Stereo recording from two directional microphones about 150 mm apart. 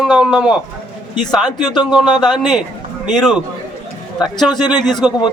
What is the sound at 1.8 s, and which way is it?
Speech, 30° left (ahead or behind).